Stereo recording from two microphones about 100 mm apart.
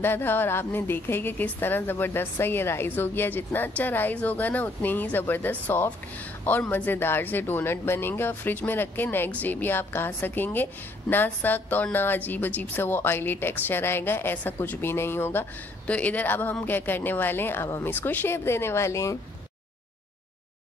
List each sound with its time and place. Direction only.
0.0 s speech: 20° left (ahead or behind)